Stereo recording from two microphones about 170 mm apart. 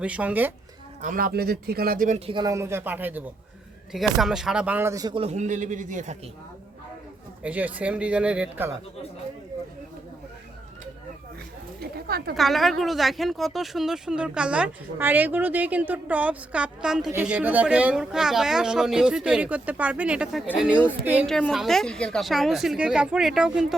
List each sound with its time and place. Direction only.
0.0 s speech: 10° right (ahead or behind)
1.0 s speech: 55° right (ahead or behind)
2.1 s a man's voice: 35° right (ahead or behind)
2.4 s speech: 20° right (ahead or behind)
5.2 s a man's voice: 40° right (ahead or behind)
7.4 s speech: 10° right (ahead or behind)
11.8 s a sound: 65° right (ahead or behind)
12.3 s speech: centre (ahead or behind)